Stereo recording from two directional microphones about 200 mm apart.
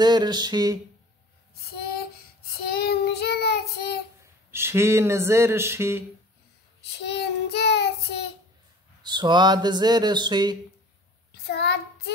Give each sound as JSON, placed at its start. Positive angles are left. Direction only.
{"t": 0.0, "sound": "speech", "side_deg": -20}
{"t": 1.5, "sound": "child singing", "side_deg": 50}
{"t": 4.2, "sound": "a sound", "side_deg": -10}
{"t": 6.8, "sound": "child singing", "side_deg": 55}
{"t": 9.0, "sound": "speech", "side_deg": -20}
{"t": 11.3, "sound": "a child's voice", "side_deg": 55}